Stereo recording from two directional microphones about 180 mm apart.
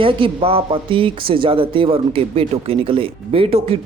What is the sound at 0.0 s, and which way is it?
Speech, 30° right (ahead or behind).